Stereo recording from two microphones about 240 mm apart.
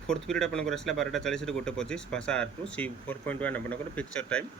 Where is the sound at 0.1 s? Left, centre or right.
Centre.